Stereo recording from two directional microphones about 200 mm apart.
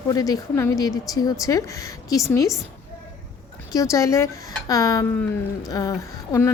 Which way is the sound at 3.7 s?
15° left (ahead or behind).